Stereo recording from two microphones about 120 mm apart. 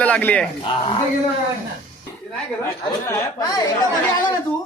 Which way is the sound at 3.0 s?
25° left (ahead or behind).